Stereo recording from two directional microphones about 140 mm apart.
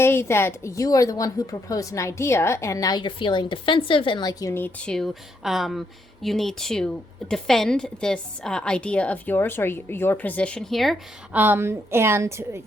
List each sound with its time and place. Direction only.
0.0 s a woman's voice: 15° left (ahead or behind)
4.9 s a woman's voice: centre (ahead or behind)
11.3 s a woman's voice: 15° right (ahead or behind)